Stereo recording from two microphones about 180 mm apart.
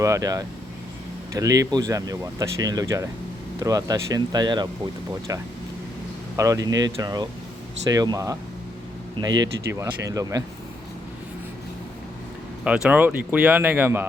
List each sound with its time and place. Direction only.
0.0 s speech: 20° right (ahead or behind)
12.6 s speech: 5° right (ahead or behind)